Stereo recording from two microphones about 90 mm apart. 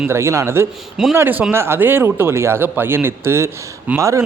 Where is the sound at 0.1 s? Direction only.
30° right (ahead or behind).